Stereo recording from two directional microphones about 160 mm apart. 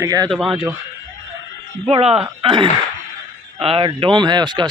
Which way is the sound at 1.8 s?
40° right (ahead or behind).